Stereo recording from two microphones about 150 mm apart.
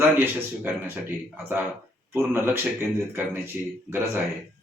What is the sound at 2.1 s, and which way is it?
Speech, 15° right (ahead or behind).